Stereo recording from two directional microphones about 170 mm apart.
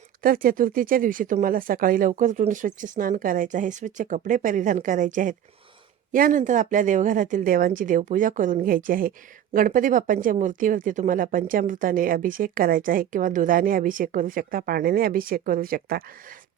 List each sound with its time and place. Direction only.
0.2 s a woman's voice: 55° right (ahead or behind)